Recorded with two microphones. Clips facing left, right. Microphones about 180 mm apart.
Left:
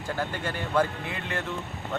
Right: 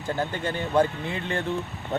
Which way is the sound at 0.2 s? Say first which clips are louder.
Right 2 dB; 25° right (ahead or behind).